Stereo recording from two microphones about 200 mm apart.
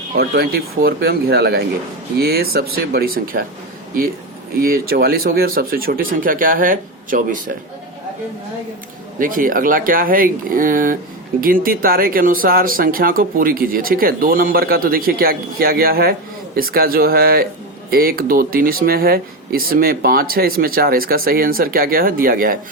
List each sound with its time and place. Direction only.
0.2 s speech: 50° right (ahead or behind)
4.5 s speech: 50° right (ahead or behind)
9.1 s speech: 45° right (ahead or behind)